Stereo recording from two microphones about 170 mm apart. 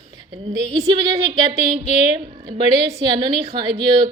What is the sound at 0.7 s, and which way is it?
Speech, 25° right (ahead or behind).